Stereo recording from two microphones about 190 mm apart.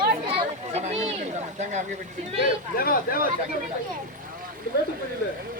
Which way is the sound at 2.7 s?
50° left (ahead or behind).